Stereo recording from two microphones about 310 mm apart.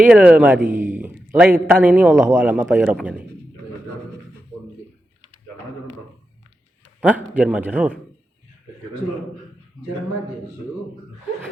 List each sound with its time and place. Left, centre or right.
0.0 s a man's voice: centre
7.0 s a man's voice: centre